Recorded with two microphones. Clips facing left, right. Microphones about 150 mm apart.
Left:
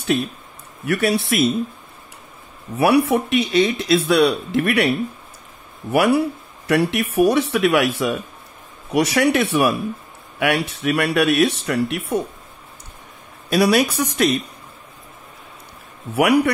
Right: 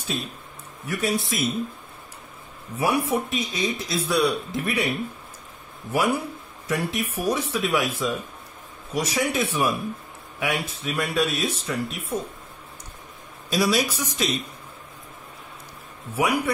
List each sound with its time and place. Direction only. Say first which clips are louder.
0.8 s speech: left 6 dB; 75° left (ahead or behind)
2.8 s speech: left 7 dB; 75° left (ahead or behind)
13.5 s speech: left 6 dB; 60° left (ahead or behind)
16.2 s speech: left 7 dB; 75° left (ahead or behind)